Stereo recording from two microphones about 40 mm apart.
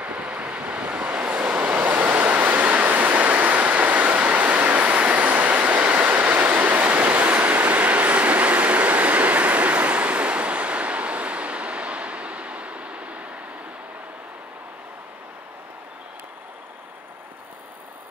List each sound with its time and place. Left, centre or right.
0.0 s vehicle: right
7.5 s train: right